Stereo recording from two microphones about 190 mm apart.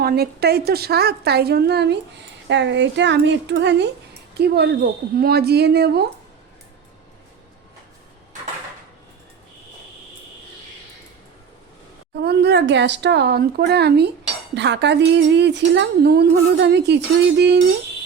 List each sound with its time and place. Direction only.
0.0 s speech: 55° right (ahead or behind)
12.2 s speech: 60° right (ahead or behind)